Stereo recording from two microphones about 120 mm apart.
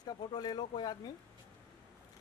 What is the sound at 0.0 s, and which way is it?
Speech, 35° left (ahead or behind).